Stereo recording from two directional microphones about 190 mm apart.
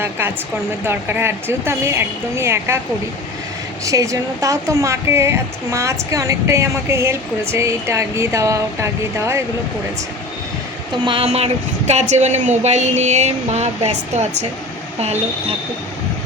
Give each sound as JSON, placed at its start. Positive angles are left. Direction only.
{"t": 0.9, "sound": "speech", "side_deg": -10}
{"t": 3.8, "sound": "speech", "side_deg": -15}
{"t": 11.0, "sound": "speech", "side_deg": -30}